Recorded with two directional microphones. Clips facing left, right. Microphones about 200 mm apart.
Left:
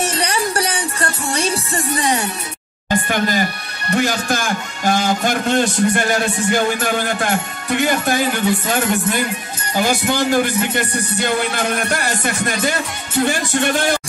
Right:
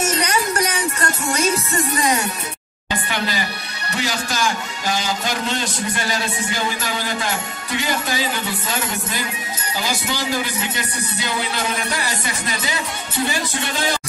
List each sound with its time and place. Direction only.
0.0 s music: 30° left (ahead or behind)
2.9 s a sound: 50° left (ahead or behind)
3.9 s a man's voice: 55° left (ahead or behind)